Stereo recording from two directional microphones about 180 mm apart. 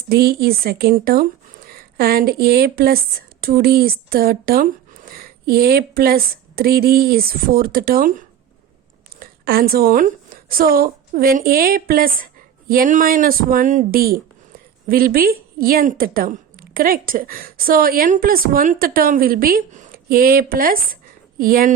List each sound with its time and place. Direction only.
0.1 s a woman's voice: 60° right (ahead or behind)